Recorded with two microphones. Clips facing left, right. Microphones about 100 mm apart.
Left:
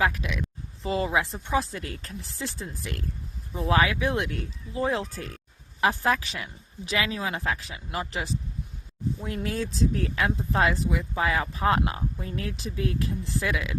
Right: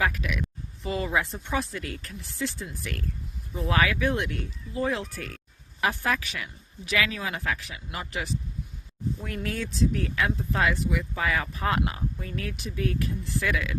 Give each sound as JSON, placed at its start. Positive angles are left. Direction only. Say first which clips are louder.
{"t": 0.0, "sound": "speech", "louder": "left 1 dB", "side_deg": 25}